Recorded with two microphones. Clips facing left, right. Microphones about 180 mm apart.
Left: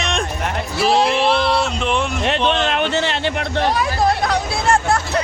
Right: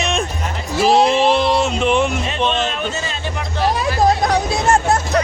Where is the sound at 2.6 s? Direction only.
70° left (ahead or behind).